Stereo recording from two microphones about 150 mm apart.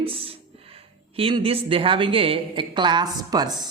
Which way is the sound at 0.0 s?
40° right (ahead or behind).